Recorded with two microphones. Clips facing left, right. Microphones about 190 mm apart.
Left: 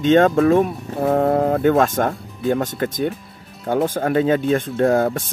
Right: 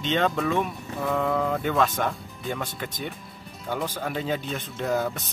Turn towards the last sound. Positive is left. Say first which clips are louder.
# left 10 dB
turn(degrees=50)  # may be behind; listen again after turning